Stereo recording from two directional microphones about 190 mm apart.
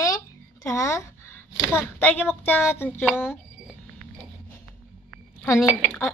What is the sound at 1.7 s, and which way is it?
A woman's voice, 10° left (ahead or behind).